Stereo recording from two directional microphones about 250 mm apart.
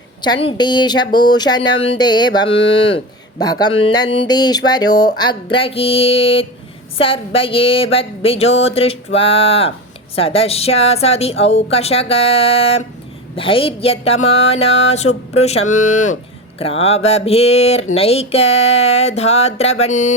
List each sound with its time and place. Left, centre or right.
0.2 s speech: centre